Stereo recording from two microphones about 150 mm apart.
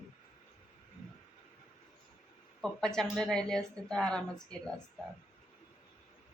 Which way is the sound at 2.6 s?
5° left (ahead or behind).